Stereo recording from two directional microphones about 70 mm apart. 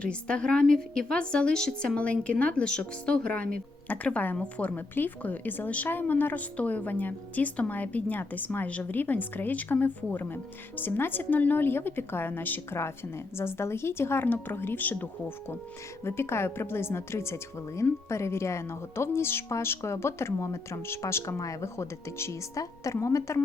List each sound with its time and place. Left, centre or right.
0.0 s a woman's voice: centre
2.0 s speech: centre
16.0 s a woman's voice: left